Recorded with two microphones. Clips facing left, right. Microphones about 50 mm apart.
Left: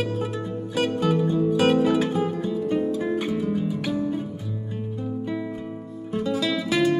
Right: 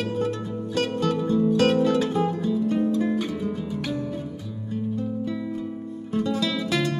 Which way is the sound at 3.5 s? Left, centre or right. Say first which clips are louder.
Left 3 dB; centre.